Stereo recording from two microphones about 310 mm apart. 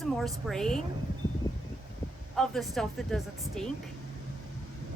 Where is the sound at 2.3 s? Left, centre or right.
Centre.